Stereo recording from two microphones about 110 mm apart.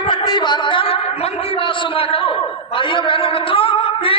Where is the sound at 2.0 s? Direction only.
55° left (ahead or behind).